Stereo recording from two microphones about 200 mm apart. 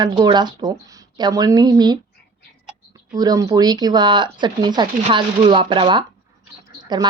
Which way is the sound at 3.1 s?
20° right (ahead or behind).